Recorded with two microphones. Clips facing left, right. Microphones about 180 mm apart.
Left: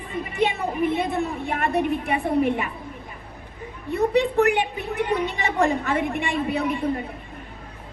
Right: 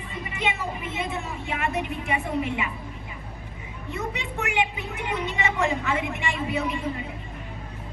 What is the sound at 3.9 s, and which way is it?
A woman's voice, 60° left (ahead or behind).